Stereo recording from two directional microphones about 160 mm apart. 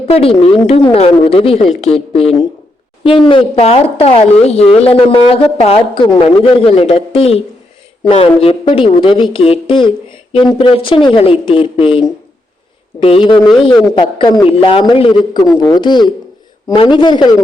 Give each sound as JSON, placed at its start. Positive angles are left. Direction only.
{"t": 0.1, "sound": "a woman's voice", "side_deg": 35}